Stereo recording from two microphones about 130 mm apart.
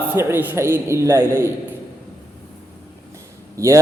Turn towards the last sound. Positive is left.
turn(degrees=-25)  # may be behind; listen again after turning